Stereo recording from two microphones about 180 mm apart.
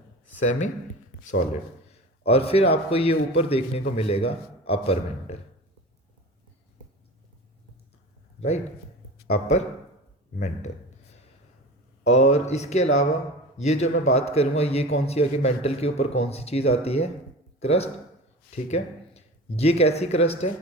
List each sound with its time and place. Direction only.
0.3 s speech: 40° left (ahead or behind)
1.9 s a man's voice: 35° left (ahead or behind)
8.4 s a man's voice: 35° left (ahead or behind)
12.0 s a man's voice: 35° left (ahead or behind)